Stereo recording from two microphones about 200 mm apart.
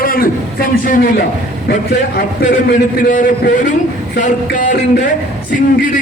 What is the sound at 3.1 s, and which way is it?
A man's voice, 40° left (ahead or behind).